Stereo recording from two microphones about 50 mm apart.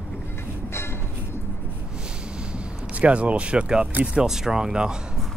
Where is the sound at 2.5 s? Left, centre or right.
Right.